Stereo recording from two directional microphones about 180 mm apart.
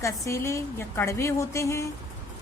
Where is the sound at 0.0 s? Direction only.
15° left (ahead or behind).